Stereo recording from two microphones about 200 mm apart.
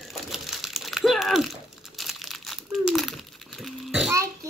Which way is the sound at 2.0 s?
Centre (ahead or behind).